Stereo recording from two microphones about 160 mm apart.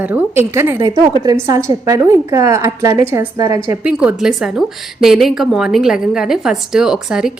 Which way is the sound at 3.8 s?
5° right (ahead or behind).